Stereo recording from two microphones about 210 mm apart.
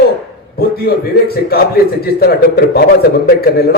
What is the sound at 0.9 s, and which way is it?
A man's voice, 45° left (ahead or behind).